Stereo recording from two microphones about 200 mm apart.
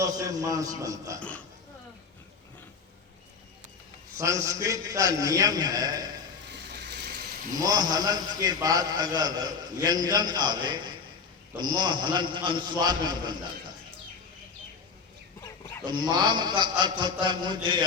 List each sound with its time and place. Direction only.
0.0 s a man's voice: 15° right (ahead or behind)
4.2 s a man's voice: 15° right (ahead or behind)
6.7 s a sound: 60° right (ahead or behind)
7.6 s a man's voice: 20° right (ahead or behind)
15.4 s a sound: 15° left (ahead or behind)
15.9 s a man's voice: 20° right (ahead or behind)